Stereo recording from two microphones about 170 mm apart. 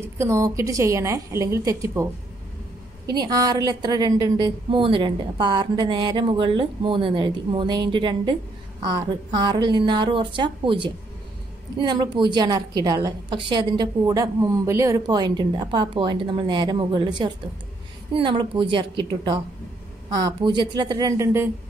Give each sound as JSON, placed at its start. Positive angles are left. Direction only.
{"t": 0.0, "sound": "a woman's voice", "side_deg": -15}
{"t": 3.1, "sound": "a woman's voice", "side_deg": -25}